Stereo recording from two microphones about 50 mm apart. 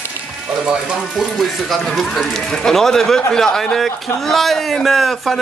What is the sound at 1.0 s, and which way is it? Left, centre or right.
Speech, centre.